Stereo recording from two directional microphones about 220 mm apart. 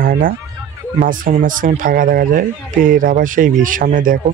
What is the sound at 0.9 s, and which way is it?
Speech, 40° right (ahead or behind).